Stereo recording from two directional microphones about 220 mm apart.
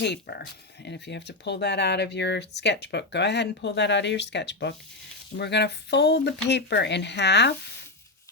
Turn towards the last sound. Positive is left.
turn(degrees=50)  # may be behind; listen again after turning